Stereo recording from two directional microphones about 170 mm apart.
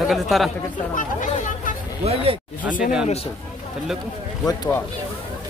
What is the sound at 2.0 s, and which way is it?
Speech, 35° right (ahead or behind).